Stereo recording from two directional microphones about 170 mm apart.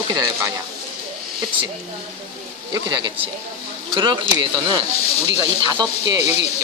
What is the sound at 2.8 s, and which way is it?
Speech, 25° right (ahead or behind).